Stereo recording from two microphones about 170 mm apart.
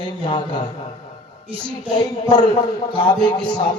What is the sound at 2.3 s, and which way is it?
Speech, 25° left (ahead or behind).